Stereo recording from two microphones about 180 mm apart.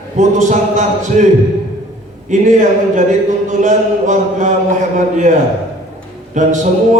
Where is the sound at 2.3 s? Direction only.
45° right (ahead or behind).